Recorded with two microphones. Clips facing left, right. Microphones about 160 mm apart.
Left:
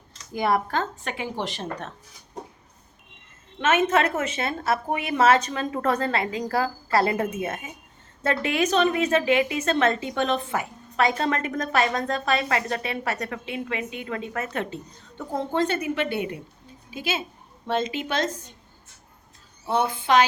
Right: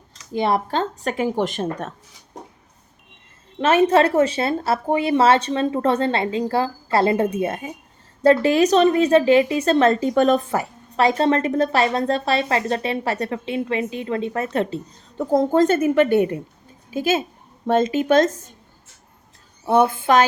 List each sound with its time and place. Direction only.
0.3 s speech: 25° right (ahead or behind); by 1.6 s 50° right (ahead or behind)
3.6 s a woman's voice: 35° right (ahead or behind)
19.6 s a woman's voice: 50° right (ahead or behind)